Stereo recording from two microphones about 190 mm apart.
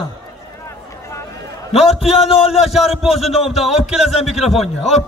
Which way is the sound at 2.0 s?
30° left (ahead or behind).